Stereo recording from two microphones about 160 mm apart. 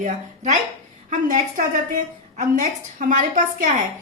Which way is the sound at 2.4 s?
55° right (ahead or behind).